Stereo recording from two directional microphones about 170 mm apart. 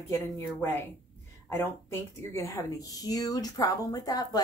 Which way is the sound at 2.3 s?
20° left (ahead or behind).